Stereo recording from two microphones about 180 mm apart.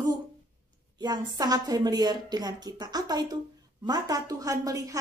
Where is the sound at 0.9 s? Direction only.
20° right (ahead or behind).